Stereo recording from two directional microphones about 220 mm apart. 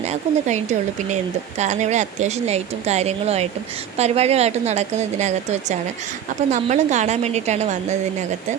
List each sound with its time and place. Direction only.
0.0 s a woman's voice: 30° right (ahead or behind)